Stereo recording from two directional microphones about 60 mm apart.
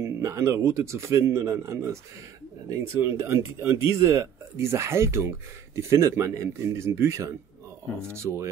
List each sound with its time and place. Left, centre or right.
0.0 s speech: right